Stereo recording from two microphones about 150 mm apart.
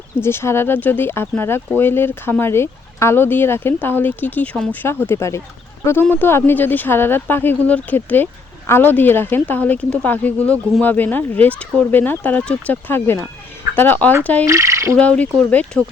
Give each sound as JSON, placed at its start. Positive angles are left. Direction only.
{"t": 0.2, "sound": "speech", "side_deg": 15}
{"t": 14.4, "sound": "fowl", "side_deg": -20}
{"t": 14.9, "sound": "speech", "side_deg": 10}